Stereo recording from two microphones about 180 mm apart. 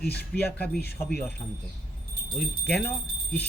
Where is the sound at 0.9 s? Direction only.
10° left (ahead or behind).